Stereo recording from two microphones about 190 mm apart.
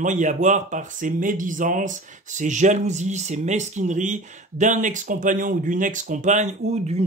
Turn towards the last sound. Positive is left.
turn(degrees=-35)  # may be behind; listen again after turning